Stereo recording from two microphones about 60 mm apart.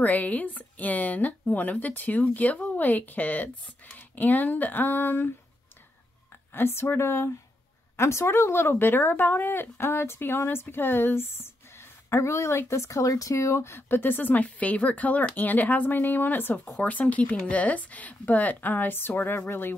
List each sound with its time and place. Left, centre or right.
0.0 s speech: left
6.5 s a woman's voice: left
12.1 s speech: left